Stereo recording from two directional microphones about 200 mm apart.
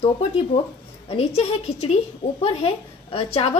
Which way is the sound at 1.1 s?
30° left (ahead or behind).